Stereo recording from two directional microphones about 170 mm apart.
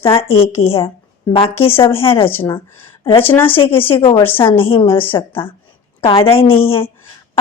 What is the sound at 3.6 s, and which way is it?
A woman's voice, 30° left (ahead or behind).